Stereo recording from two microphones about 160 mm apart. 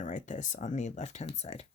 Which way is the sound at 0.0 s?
50° left (ahead or behind).